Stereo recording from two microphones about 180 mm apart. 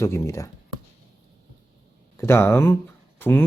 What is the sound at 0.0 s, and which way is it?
Speech, 15° left (ahead or behind).